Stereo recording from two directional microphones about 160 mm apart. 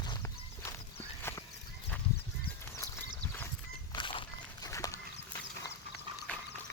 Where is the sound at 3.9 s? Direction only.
30° left (ahead or behind).